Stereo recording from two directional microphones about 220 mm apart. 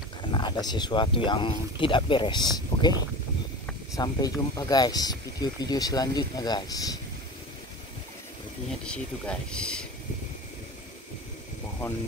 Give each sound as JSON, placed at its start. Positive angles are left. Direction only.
{"t": 0.2, "sound": "a sound", "side_deg": 20}
{"t": 0.7, "sound": "speech", "side_deg": 20}
{"t": 8.8, "sound": "speech", "side_deg": 5}